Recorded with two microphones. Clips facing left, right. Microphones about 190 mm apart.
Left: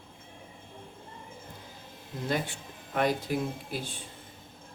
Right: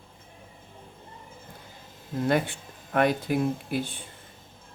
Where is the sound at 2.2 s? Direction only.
60° right (ahead or behind).